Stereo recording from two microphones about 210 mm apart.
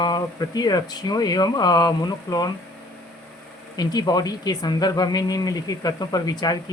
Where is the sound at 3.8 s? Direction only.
20° left (ahead or behind).